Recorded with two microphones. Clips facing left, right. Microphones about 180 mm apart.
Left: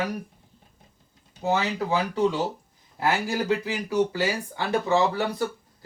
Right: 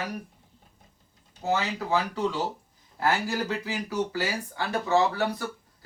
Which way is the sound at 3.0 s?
15° left (ahead or behind).